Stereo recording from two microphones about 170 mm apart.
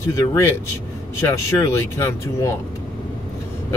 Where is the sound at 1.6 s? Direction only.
15° left (ahead or behind).